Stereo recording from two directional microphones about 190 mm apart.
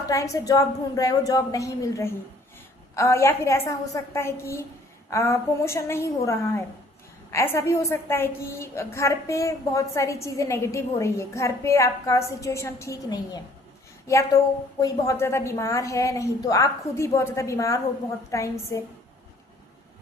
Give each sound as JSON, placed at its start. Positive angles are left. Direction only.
{"t": 0.1, "sound": "a woman's voice", "side_deg": 15}